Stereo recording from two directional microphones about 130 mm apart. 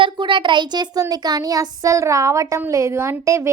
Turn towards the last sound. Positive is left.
turn(degrees=-20)  # may be behind; listen again after turning